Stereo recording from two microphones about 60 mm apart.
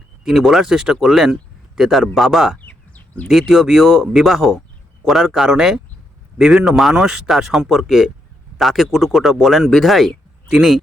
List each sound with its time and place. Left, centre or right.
0.3 s speech: centre
1.3 s a sound: centre
2.1 s speech: centre
2.6 s bird: left
3.2 s speech: centre